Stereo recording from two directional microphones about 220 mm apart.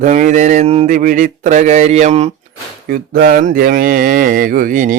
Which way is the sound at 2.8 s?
40° right (ahead or behind).